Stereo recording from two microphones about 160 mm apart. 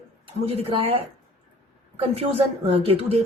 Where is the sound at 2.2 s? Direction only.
35° right (ahead or behind).